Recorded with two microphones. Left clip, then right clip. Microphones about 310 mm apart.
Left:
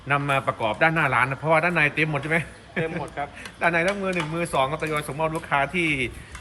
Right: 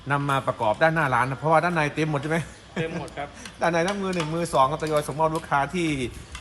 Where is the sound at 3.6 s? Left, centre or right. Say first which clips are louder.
Left 1 dB; centre.